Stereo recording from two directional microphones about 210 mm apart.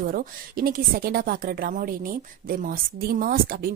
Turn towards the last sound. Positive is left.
turn(degrees=-45)  # may be behind; listen again after turning